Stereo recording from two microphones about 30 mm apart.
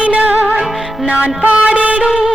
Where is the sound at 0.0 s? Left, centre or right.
Right.